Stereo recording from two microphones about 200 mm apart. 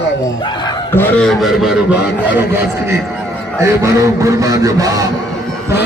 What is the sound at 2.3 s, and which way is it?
A man's voice, 10° right (ahead or behind).